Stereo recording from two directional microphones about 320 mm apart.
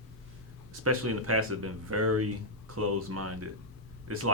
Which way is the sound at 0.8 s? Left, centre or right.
Right.